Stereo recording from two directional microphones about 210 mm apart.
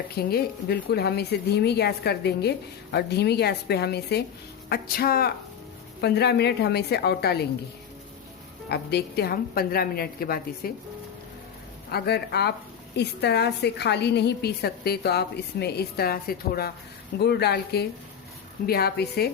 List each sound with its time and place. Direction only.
0.2 s a woman's voice: 45° left (ahead or behind)
8.7 s a woman's voice: 50° left (ahead or behind)
11.9 s a woman's voice: 50° left (ahead or behind)